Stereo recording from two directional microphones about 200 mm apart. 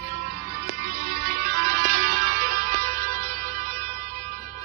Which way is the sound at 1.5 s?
35° right (ahead or behind).